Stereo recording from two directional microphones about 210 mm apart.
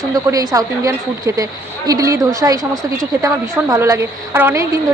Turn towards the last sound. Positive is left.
turn(degrees=-10)  # may be behind; listen again after turning